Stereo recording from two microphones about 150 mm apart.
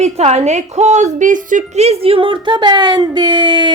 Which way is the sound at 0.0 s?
45° right (ahead or behind).